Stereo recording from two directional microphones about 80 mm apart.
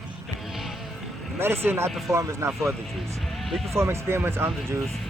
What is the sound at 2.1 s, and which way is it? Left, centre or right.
Speech, right.